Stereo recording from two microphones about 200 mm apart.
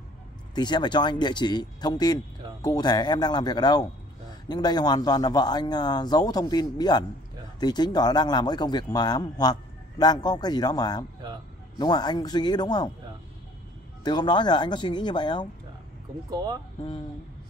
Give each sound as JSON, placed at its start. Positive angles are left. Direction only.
{"t": 0.6, "sound": "speech", "side_deg": 20}
{"t": 14.0, "sound": "speech", "side_deg": 20}
{"t": 16.3, "sound": "speech", "side_deg": -20}